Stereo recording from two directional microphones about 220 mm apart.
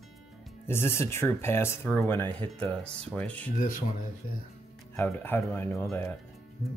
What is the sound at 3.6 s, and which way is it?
Speech, 40° left (ahead or behind).